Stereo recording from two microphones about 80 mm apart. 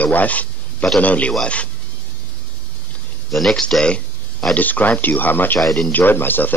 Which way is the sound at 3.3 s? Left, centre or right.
Centre.